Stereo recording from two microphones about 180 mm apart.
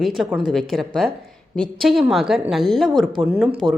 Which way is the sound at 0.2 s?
5° right (ahead or behind).